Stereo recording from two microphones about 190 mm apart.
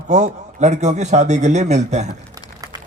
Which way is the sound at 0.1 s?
40° right (ahead or behind).